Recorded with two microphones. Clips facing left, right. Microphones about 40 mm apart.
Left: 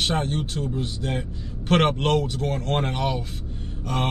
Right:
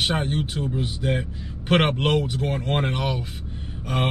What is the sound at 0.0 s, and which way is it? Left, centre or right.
Speech, centre.